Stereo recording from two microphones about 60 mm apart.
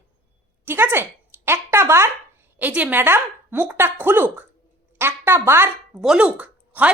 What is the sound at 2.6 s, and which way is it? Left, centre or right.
A woman's voice, right.